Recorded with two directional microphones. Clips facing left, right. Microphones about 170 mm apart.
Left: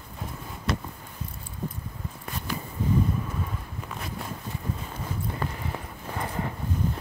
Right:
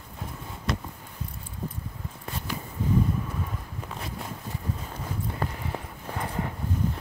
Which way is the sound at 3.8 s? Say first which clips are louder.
Even; 30° right (ahead or behind).